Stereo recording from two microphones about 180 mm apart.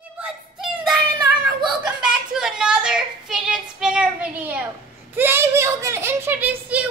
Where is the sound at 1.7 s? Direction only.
5° right (ahead or behind).